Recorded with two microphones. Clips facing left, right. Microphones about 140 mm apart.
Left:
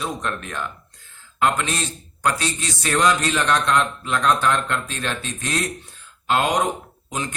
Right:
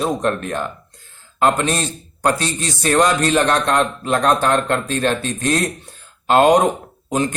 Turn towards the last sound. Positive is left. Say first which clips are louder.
# right 9 dB
turn(degrees=-50)  # may be behind; listen again after turning